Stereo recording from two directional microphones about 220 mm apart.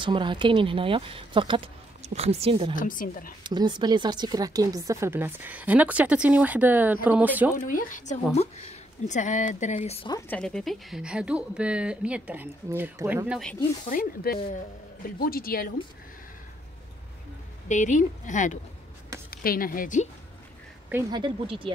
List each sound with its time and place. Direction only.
0.0 s speech: 20° right (ahead or behind)
2.7 s speech: 40° left (ahead or behind)
3.4 s speech: 20° right (ahead or behind)
7.5 s speech: 40° left (ahead or behind)
10.1 s speech: 10° left (ahead or behind); by 13.4 s 10° right (ahead or behind)
13.8 s speech: 40° left (ahead or behind)
17.6 s speech: 35° left (ahead or behind)
21.1 s speech: 20° right (ahead or behind)